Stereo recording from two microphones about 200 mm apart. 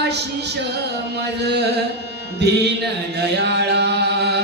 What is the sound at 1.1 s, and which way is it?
Chant, 55° right (ahead or behind).